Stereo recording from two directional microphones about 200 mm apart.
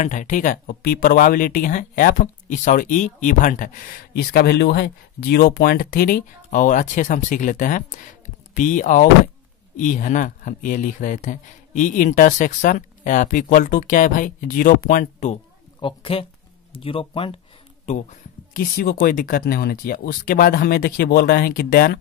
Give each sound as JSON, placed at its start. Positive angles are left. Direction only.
{"t": 0.0, "sound": "speech", "side_deg": 40}
{"t": 15.8, "sound": "a woman's voice", "side_deg": 25}
{"t": 18.5, "sound": "speech", "side_deg": 45}